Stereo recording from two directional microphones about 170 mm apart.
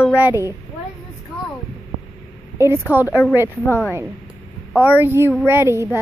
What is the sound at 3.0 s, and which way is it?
Speech, 15° left (ahead or behind).